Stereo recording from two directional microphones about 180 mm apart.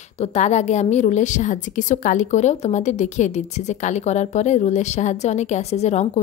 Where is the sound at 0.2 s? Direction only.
40° left (ahead or behind).